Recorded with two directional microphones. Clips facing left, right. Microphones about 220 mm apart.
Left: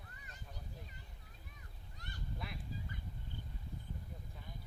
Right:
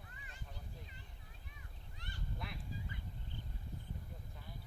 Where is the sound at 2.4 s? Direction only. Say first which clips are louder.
Left 1 dB; centre (ahead or behind).